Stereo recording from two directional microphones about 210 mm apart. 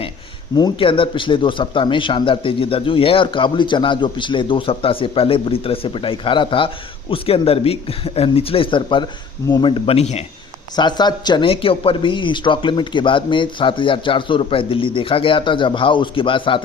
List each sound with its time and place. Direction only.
0.5 s speech: 20° left (ahead or behind)